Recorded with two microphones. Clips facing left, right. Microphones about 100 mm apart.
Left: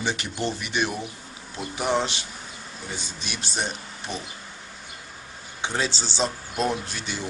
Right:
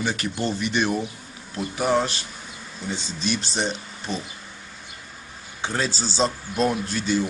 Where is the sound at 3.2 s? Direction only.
10° left (ahead or behind).